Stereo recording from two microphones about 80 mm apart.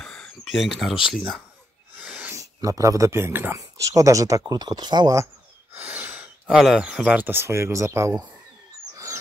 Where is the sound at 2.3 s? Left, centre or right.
Right.